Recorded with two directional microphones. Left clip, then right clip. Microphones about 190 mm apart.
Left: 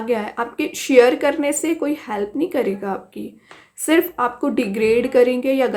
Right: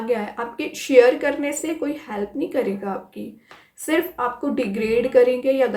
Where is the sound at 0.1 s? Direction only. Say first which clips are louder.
Left 3 dB; 30° left (ahead or behind).